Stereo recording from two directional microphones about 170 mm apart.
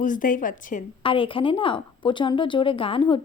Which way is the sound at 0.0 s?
50° left (ahead or behind).